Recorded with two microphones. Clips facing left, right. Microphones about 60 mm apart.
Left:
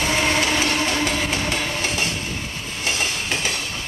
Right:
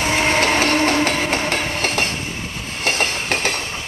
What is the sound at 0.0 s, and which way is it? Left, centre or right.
Train, right.